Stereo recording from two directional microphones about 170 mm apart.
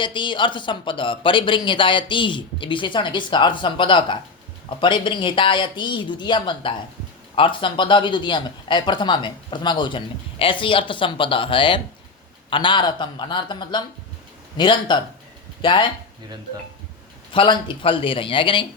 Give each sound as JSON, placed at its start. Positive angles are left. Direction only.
{"t": 0.0, "sound": "speech", "side_deg": 30}
{"t": 17.3, "sound": "speech", "side_deg": 30}